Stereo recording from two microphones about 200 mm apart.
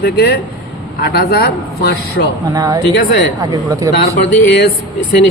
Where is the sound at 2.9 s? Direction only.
50° left (ahead or behind).